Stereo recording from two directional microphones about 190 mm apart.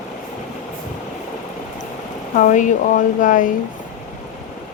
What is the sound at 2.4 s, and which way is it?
Speech, 40° left (ahead or behind).